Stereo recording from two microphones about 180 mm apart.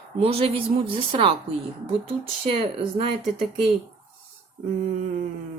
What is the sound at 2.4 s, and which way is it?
Speech, 30° right (ahead or behind).